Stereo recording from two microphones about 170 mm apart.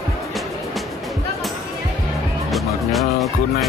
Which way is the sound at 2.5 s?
Centre (ahead or behind).